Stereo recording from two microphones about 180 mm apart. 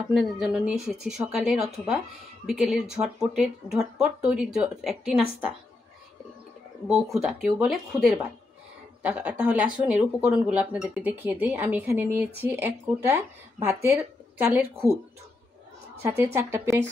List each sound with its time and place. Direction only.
0.1 s speech: 5° right (ahead or behind)
7.2 s speech: 5° right (ahead or behind)
16.0 s speech: 10° right (ahead or behind)